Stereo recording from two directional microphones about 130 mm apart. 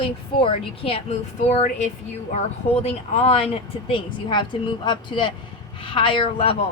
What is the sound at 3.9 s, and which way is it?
A woman's voice, 40° left (ahead or behind).